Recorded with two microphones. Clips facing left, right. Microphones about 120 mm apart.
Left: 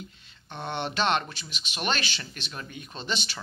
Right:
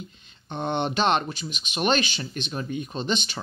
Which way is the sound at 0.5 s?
20° right (ahead or behind).